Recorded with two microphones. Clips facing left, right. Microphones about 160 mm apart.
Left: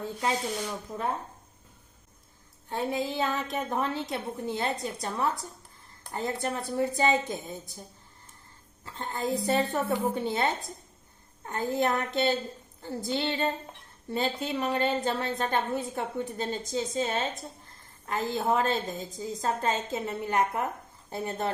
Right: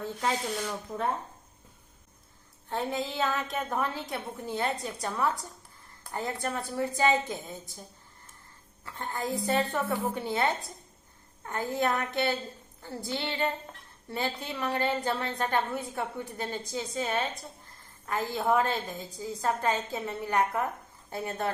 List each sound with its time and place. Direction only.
0.2 s speech: 5° left (ahead or behind)
2.6 s a woman's voice: 15° left (ahead or behind)
8.8 s a woman's voice: 20° left (ahead or behind)